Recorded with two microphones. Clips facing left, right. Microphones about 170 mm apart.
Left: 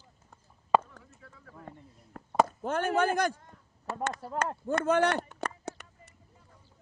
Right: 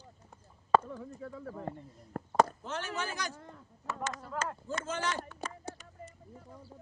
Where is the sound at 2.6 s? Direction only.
55° left (ahead or behind).